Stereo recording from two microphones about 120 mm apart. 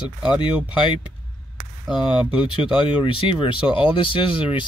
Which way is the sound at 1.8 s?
5° right (ahead or behind).